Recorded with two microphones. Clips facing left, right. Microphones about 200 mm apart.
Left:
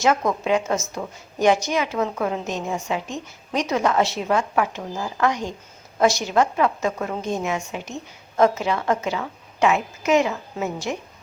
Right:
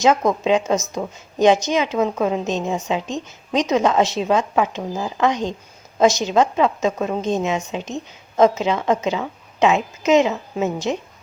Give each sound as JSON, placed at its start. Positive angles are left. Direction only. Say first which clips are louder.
{"t": 0.0, "sound": "a woman's voice", "louder": "right 4 dB", "side_deg": -20}